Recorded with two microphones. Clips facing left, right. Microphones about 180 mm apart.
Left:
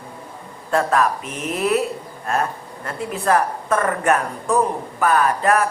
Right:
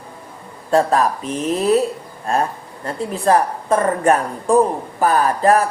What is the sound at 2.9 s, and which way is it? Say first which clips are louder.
Speech: right 3 dB; 30° right (ahead or behind).